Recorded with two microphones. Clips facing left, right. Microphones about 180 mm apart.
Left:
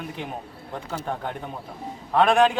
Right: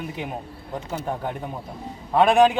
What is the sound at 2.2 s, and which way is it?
Speech, 10° right (ahead or behind).